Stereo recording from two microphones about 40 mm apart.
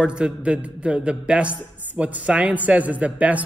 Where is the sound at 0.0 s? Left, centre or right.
Right.